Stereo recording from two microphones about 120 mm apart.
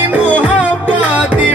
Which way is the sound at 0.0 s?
15° right (ahead or behind).